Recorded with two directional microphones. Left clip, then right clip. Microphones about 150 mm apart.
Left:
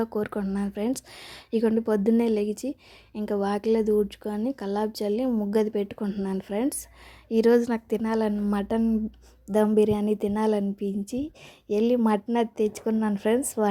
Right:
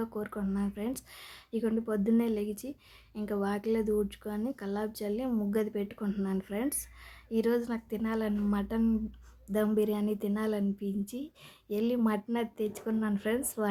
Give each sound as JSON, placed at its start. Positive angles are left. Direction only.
{"t": 0.0, "sound": "a woman's voice", "side_deg": 45}
{"t": 6.0, "sound": "speech", "side_deg": 25}
{"t": 6.3, "sound": "speech", "side_deg": 35}